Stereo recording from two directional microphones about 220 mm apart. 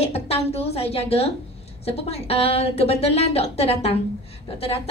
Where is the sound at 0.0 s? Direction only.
25° left (ahead or behind).